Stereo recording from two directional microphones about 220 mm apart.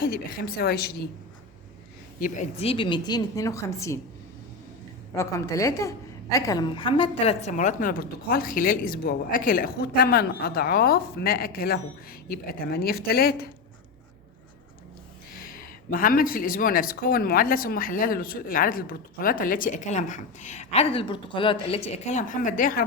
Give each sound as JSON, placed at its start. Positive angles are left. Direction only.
{"t": 0.0, "sound": "a woman's voice", "side_deg": 45}
{"t": 2.1, "sound": "a woman's voice", "side_deg": 35}
{"t": 5.1, "sound": "a woman's voice", "side_deg": 15}
{"t": 15.4, "sound": "speech", "side_deg": 40}